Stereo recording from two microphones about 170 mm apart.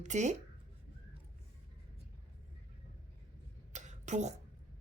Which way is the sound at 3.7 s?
45° right (ahead or behind).